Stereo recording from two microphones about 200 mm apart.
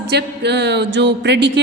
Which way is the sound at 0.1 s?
55° right (ahead or behind).